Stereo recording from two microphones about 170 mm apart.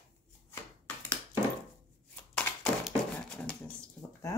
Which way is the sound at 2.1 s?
5° left (ahead or behind).